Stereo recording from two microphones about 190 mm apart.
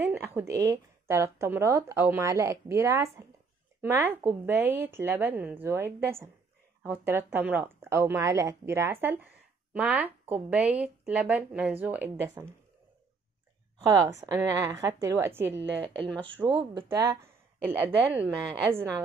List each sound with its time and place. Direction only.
0.0 s speech: 10° right (ahead or behind)
14.2 s speech: 15° right (ahead or behind)
15.8 s speech: 25° right (ahead or behind)
16.1 s speech: 5° left (ahead or behind)
16.4 s speech: 25° right (ahead or behind)
16.9 s speech: 15° right (ahead or behind)